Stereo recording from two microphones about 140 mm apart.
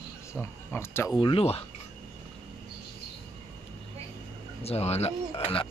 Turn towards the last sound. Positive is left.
turn(degrees=40)  # may be behind; listen again after turning